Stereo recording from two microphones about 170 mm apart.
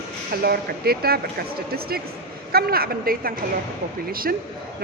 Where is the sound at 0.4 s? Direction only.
65° right (ahead or behind).